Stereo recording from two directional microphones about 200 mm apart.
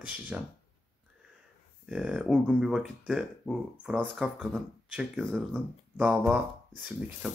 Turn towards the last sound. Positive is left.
turn(degrees=0)  # may be behind; listen again after turning